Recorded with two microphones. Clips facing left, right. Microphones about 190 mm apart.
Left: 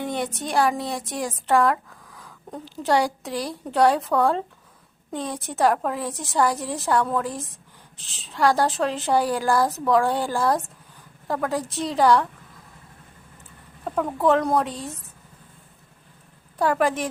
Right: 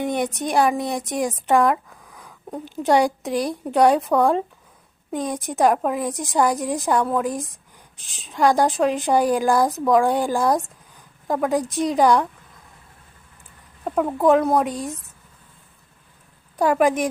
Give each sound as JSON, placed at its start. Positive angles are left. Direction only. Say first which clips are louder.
{"t": 0.0, "sound": "a woman's voice", "louder": "right 4 dB", "side_deg": -15}
{"t": 13.8, "sound": "a woman's voice", "louder": "right 3 dB", "side_deg": -15}
{"t": 16.6, "sound": "a woman's voice", "louder": "right 4 dB", "side_deg": -15}